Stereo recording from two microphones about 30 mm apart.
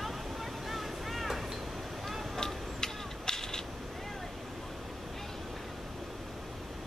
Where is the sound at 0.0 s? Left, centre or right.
Centre.